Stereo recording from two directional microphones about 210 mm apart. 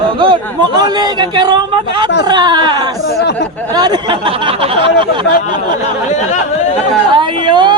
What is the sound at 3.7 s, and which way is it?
Speech, 20° right (ahead or behind).